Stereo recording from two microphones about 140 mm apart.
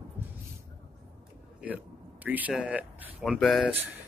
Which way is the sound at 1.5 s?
10° right (ahead or behind).